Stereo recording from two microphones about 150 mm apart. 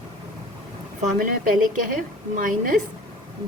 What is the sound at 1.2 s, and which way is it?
A woman's voice, 65° right (ahead or behind).